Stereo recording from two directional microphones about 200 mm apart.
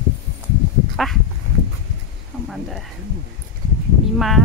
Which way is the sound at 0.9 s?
Centre (ahead or behind).